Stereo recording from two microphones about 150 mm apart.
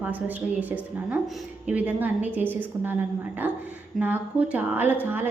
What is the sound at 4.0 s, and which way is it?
A woman's voice, 10° right (ahead or behind).